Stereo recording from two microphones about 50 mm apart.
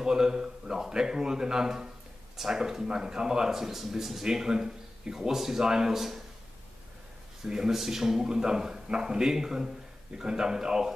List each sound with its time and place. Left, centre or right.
0.0 s speech: centre
7.4 s speech: centre